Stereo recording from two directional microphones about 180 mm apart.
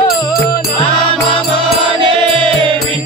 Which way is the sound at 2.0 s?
30° right (ahead or behind).